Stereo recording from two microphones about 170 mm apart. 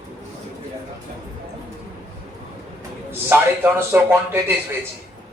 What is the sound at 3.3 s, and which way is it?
Speech, 10° right (ahead or behind).